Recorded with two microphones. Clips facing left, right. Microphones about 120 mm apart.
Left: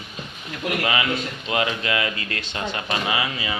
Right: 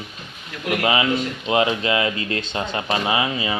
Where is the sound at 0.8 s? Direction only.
25° right (ahead or behind).